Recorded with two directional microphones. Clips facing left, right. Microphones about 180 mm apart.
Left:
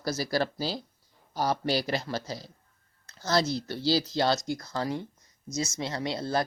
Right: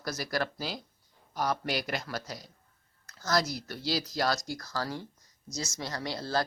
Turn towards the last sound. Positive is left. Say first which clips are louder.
# left 3 dB
turn(degrees=20)  # may be behind; listen again after turning